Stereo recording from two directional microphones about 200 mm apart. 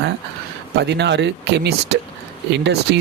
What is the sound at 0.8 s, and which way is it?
Speech, 60° right (ahead or behind).